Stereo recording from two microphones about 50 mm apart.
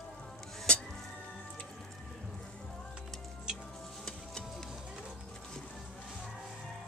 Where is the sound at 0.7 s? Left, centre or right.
Left.